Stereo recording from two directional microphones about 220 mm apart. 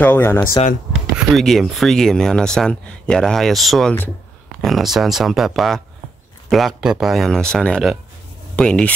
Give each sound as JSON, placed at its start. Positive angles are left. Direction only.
{"t": 0.0, "sound": "speech", "side_deg": 10}
{"t": 0.5, "sound": "speech", "side_deg": 35}
{"t": 1.3, "sound": "speech", "side_deg": 0}